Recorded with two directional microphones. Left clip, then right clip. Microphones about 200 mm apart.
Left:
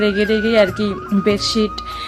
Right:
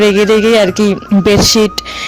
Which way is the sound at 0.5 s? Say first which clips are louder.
Right 5 dB; 40° right (ahead or behind).